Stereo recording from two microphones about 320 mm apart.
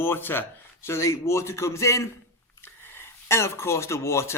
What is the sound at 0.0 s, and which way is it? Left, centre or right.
Speech, centre.